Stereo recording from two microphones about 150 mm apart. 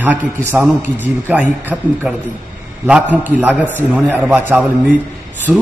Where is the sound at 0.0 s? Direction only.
10° right (ahead or behind).